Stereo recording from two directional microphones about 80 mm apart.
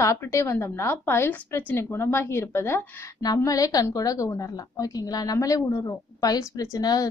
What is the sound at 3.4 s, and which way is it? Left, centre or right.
A woman's voice, left.